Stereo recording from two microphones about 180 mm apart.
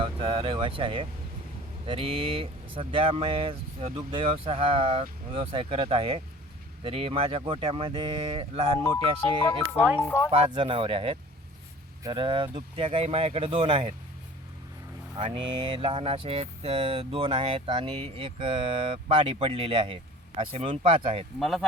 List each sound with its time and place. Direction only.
0.0 s speech: 30° right (ahead or behind)
10.3 s speech: 30° right (ahead or behind)
15.2 s speech: 30° right (ahead or behind)
21.3 s speech: centre (ahead or behind)